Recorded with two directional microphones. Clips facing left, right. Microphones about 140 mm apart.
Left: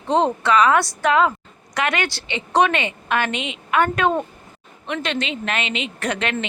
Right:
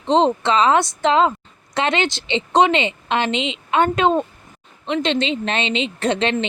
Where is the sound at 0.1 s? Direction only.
20° right (ahead or behind).